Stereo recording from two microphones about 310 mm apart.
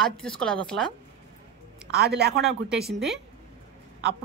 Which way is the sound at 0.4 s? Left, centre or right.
Centre.